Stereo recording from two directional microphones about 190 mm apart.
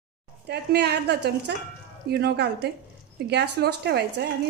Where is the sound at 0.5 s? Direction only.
60° right (ahead or behind).